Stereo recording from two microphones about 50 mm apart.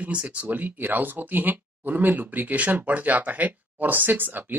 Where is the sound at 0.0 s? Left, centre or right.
Right.